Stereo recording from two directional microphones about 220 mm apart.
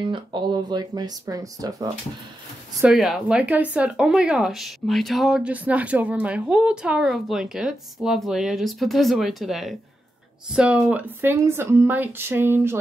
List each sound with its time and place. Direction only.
0.1 s speech: 20° right (ahead or behind)
2.8 s speech: centre (ahead or behind)